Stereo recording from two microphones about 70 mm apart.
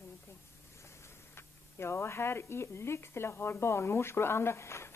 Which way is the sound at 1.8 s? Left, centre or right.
Left.